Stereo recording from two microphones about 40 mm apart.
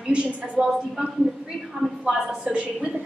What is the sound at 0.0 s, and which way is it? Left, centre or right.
Speech, right.